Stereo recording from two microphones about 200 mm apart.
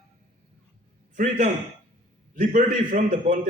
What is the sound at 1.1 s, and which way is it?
A man's voice, 40° right (ahead or behind).